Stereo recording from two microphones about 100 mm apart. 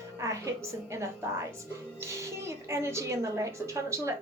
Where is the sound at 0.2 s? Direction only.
30° right (ahead or behind).